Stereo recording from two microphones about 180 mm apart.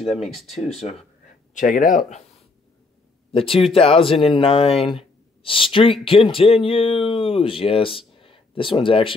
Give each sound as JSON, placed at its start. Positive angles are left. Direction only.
{"t": 0.1, "sound": "speech", "side_deg": 0}
{"t": 0.5, "sound": "speech", "side_deg": 35}
{"t": 1.5, "sound": "speech", "side_deg": 45}
{"t": 3.3, "sound": "speech", "side_deg": 30}
{"t": 4.7, "sound": "speech", "side_deg": 0}
{"t": 5.4, "sound": "speech", "side_deg": 30}